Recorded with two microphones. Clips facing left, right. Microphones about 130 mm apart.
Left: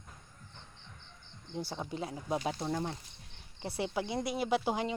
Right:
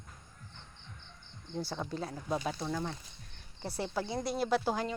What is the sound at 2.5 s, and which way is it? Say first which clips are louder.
Speech: left 1 dB; 30° left (ahead or behind).